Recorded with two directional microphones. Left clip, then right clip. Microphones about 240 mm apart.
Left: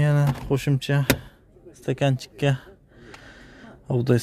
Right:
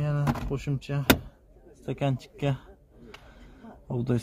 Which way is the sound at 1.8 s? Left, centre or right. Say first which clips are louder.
Left 6 dB; left.